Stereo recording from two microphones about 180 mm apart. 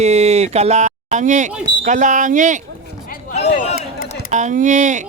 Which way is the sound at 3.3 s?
35° left (ahead or behind).